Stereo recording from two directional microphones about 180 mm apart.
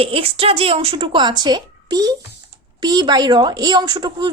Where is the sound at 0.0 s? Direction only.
30° right (ahead or behind).